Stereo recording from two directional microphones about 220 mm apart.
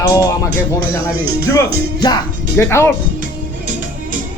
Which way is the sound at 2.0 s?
15° left (ahead or behind).